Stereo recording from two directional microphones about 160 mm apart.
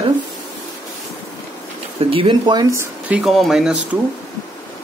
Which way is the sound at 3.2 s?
Centre (ahead or behind).